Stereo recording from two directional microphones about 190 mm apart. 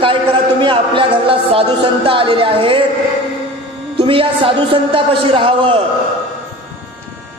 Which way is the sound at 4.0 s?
30° right (ahead or behind).